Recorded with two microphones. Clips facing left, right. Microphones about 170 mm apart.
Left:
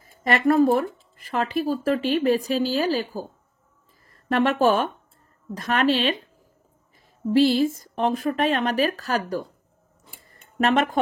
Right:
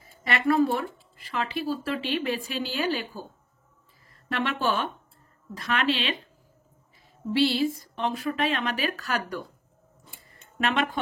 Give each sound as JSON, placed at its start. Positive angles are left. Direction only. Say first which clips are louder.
{"t": 0.0, "sound": "speech", "louder": "left 6 dB", "side_deg": 45}
{"t": 4.3, "sound": "speech", "louder": "left 8 dB", "side_deg": 45}
{"t": 7.3, "sound": "speech", "louder": "left 5 dB", "side_deg": 45}
{"t": 10.6, "sound": "speech", "louder": "left 6 dB", "side_deg": 40}